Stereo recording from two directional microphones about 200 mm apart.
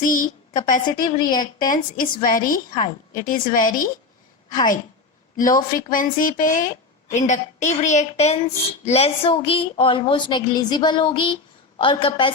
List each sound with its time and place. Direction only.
0.0 s speech: 45° left (ahead or behind)
1.0 s a woman's voice: 20° left (ahead or behind)
1.5 s speech: 45° left (ahead or behind)
5.4 s a woman's voice: 45° left (ahead or behind); by 12.3 s 25° left (ahead or behind)